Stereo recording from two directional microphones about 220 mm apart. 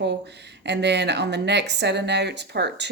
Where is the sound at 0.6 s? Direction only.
50° right (ahead or behind).